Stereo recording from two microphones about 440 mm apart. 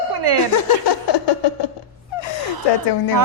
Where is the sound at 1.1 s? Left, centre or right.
Left.